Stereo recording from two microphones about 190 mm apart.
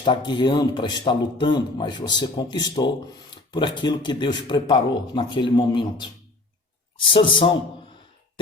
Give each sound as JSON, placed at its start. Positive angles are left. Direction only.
{"t": 0.0, "sound": "speech", "side_deg": 25}